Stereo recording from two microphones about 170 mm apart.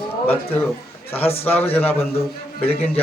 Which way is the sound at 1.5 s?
10° left (ahead or behind).